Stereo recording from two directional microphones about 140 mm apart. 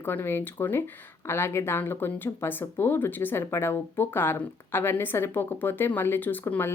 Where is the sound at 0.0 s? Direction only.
15° left (ahead or behind).